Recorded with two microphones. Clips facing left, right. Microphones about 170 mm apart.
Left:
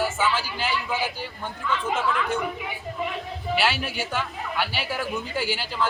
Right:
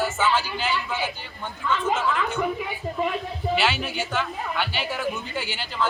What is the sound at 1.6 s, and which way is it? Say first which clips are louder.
Speech: right 2 dB; 35° right (ahead or behind).